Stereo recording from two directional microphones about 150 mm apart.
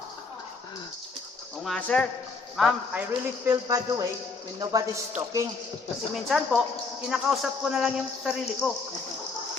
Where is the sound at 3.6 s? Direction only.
25° right (ahead or behind).